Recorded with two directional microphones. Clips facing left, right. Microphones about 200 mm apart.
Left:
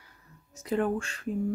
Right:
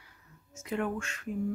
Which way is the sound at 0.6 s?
35° left (ahead or behind).